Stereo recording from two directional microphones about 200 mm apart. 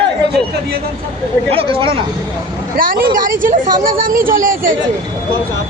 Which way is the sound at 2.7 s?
45° right (ahead or behind).